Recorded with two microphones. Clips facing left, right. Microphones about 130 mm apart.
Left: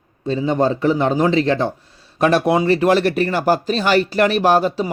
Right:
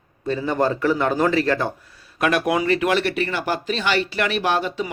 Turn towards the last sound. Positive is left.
turn(degrees=40)  # may be behind; listen again after turning